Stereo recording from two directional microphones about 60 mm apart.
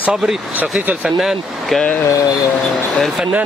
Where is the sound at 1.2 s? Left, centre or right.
Centre.